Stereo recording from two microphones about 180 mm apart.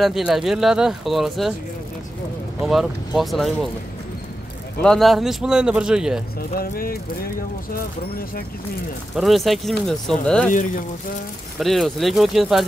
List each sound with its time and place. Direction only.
0.0 s speech: centre (ahead or behind)
2.6 s speech: centre (ahead or behind)
4.8 s speech: centre (ahead or behind)
6.6 s speech: 55° left (ahead or behind)
9.1 s speech: centre (ahead or behind)
11.6 s speech: centre (ahead or behind)